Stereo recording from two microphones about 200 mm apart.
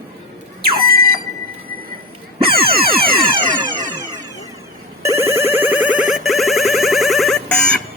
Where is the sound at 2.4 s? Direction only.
50° right (ahead or behind).